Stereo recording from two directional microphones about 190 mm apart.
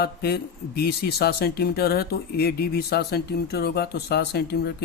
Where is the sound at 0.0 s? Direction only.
55° left (ahead or behind).